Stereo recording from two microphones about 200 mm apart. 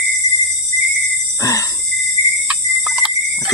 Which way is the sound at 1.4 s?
15° left (ahead or behind).